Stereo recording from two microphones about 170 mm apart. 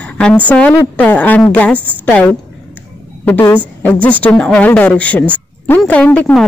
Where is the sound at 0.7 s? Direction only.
10° left (ahead or behind).